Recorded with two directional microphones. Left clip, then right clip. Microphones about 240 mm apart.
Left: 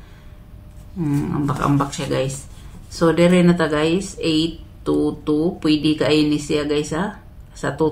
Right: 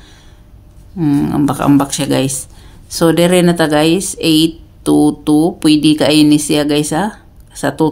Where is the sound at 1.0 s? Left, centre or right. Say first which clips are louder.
Right 9 dB; right.